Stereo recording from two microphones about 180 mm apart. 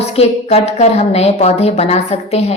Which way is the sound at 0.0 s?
35° left (ahead or behind).